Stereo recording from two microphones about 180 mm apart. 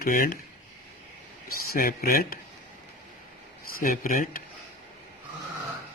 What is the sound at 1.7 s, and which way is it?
Speech, 50° left (ahead or behind).